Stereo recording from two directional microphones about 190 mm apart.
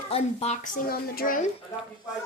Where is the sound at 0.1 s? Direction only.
35° left (ahead or behind); by 1.4 s 50° left (ahead or behind).